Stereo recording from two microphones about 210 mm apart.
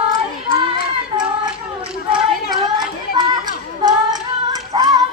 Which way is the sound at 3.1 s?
20° right (ahead or behind).